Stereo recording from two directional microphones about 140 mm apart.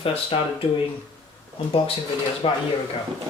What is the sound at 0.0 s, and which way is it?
Speech, 40° left (ahead or behind).